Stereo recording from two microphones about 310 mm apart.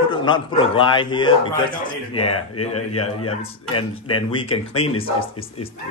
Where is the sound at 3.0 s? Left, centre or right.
Left.